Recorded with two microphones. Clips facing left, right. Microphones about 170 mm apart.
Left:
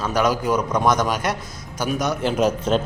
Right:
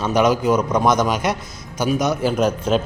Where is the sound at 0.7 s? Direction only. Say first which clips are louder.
Right 2 dB; 10° right (ahead or behind).